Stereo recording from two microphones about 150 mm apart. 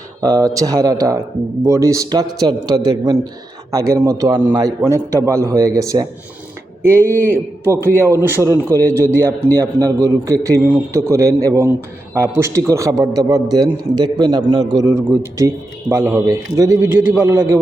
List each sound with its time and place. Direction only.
0.2 s a man's voice: 25° right (ahead or behind)